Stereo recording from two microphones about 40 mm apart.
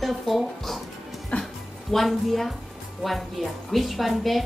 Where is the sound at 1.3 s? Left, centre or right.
Left.